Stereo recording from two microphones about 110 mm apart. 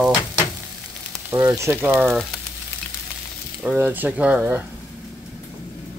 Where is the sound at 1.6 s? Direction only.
20° right (ahead or behind).